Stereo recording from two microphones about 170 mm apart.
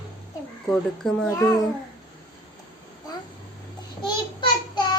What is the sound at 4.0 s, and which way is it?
Child singing, 30° left (ahead or behind).